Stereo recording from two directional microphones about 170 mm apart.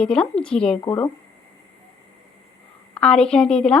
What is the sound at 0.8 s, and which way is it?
Speech, 20° left (ahead or behind).